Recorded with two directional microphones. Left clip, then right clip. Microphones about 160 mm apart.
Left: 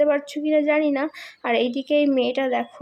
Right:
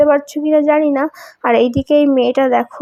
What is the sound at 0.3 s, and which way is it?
Speech, 35° right (ahead or behind).